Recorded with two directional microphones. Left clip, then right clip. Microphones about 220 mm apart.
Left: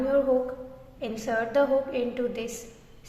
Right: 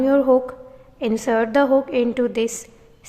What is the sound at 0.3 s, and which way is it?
A woman's voice, 40° right (ahead or behind).